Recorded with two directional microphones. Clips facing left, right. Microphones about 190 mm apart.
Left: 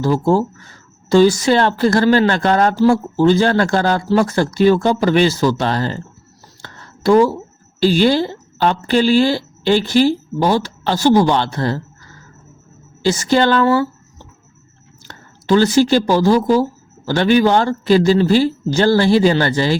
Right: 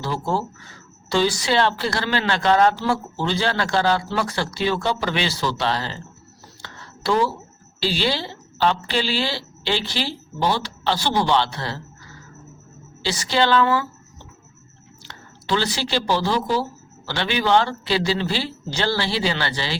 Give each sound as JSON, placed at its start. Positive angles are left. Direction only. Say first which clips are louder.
{"t": 0.0, "sound": "speech", "louder": "left 10 dB", "side_deg": 45}
{"t": 6.6, "sound": "a sound", "louder": "left 6 dB", "side_deg": 50}
{"t": 7.8, "sound": "speech", "louder": "left 10 dB", "side_deg": 50}
{"t": 13.0, "sound": "speech", "louder": "left 7 dB", "side_deg": 45}